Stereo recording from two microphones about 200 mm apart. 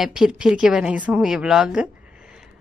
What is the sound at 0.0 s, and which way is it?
Speech, centre (ahead or behind).